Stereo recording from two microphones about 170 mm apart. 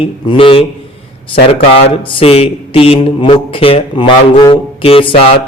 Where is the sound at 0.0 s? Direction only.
30° left (ahead or behind).